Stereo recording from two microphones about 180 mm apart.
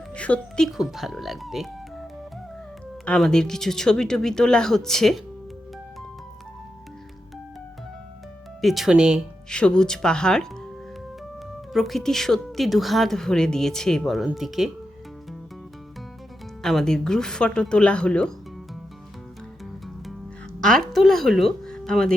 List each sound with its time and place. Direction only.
0.1 s a woman's voice: 5° left (ahead or behind)
3.1 s a woman's voice: 5° left (ahead or behind)
8.6 s a woman's voice: centre (ahead or behind)
11.7 s a woman's voice: centre (ahead or behind)
16.6 s a woman's voice: 5° left (ahead or behind)
20.6 s a sound: 5° left (ahead or behind)